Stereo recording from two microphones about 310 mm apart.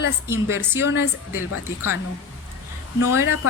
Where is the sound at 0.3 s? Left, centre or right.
Centre.